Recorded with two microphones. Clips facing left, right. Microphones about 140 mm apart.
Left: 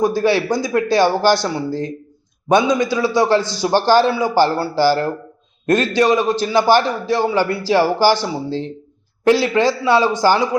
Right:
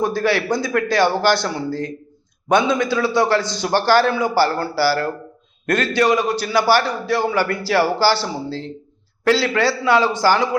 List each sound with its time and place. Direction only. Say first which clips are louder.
0.0 s a man's voice: left 3 dB; 15° left (ahead or behind)